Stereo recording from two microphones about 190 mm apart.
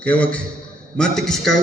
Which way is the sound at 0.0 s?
5° left (ahead or behind).